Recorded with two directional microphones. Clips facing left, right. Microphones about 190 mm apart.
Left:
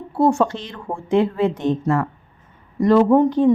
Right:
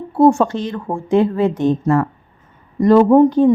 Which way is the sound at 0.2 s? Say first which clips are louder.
Right 5 dB; 45° right (ahead or behind).